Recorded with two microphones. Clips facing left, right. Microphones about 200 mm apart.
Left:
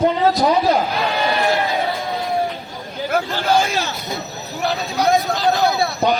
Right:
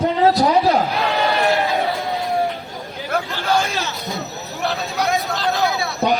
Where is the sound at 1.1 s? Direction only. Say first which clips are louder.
Right 1 dB; centre (ahead or behind).